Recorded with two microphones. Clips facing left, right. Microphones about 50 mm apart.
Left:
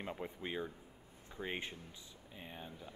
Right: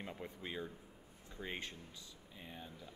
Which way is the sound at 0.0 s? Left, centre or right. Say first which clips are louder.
Left 3 dB; centre.